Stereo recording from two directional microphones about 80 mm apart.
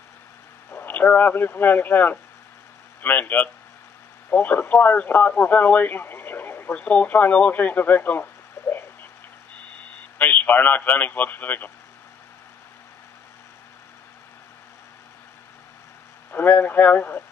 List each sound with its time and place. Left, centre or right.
0.7 s a man's voice: left
10.1 s a man's voice: left
16.3 s a man's voice: left